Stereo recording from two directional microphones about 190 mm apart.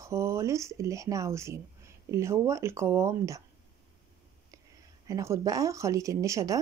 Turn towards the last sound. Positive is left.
turn(degrees=-15)  # may be behind; listen again after turning